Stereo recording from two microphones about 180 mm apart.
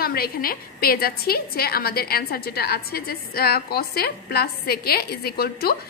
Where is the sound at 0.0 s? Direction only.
55° left (ahead or behind).